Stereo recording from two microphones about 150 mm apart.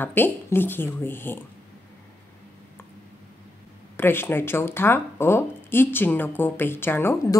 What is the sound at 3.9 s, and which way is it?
Speech, 15° left (ahead or behind).